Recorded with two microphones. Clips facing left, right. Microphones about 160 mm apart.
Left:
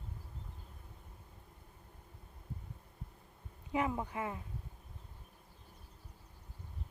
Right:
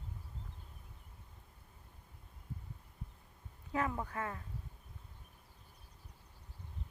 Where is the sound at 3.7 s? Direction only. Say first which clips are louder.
Left 2 dB; 15° left (ahead or behind).